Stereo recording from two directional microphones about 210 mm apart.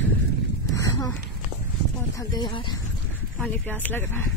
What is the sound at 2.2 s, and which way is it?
Speech, 20° left (ahead or behind).